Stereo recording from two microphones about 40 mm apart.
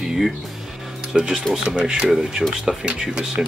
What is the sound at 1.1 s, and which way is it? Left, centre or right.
Speech, right.